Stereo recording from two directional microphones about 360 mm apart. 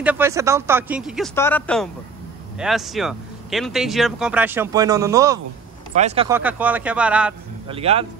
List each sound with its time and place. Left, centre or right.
0.0 s speech: centre
7.6 s a man's voice: centre